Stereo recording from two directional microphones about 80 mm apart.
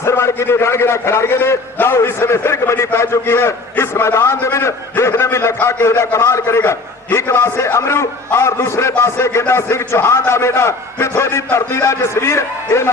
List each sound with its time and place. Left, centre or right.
0.0 s a man's voice: left